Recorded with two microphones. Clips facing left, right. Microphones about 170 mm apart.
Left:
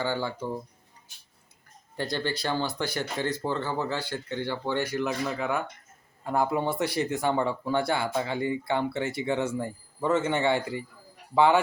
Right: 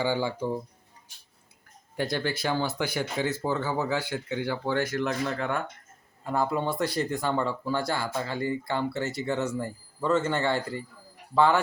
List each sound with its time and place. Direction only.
0.0 s speech: 10° right (ahead or behind)
2.0 s speech: 10° right (ahead or behind)
4.9 s speech: 5° left (ahead or behind)